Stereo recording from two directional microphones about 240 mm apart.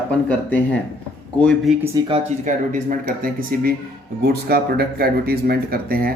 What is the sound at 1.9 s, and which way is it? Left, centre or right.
Speech, centre.